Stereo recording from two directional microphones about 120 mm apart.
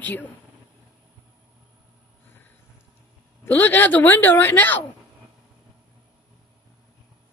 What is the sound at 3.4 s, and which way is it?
Speech, 15° left (ahead or behind).